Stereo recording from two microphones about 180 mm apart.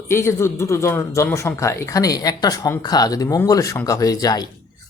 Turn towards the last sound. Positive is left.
turn(degrees=20)  # may be behind; listen again after turning